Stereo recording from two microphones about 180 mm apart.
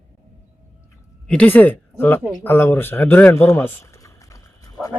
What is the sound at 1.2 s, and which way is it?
Speech, 5° left (ahead or behind).